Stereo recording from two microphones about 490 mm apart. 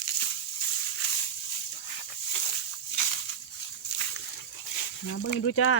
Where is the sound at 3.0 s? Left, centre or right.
Left.